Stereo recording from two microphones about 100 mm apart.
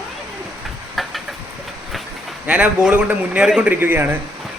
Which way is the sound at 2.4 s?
15° right (ahead or behind).